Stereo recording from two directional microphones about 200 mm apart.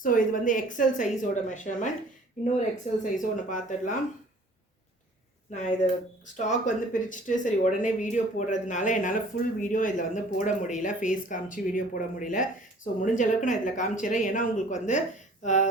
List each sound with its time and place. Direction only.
0.0 s speech: 40° left (ahead or behind)
6.3 s speech: 40° left (ahead or behind)